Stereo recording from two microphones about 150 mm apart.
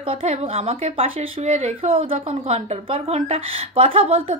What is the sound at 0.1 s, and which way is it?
Speech, 40° right (ahead or behind).